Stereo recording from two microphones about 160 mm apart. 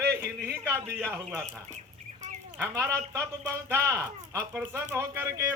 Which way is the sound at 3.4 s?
20° right (ahead or behind).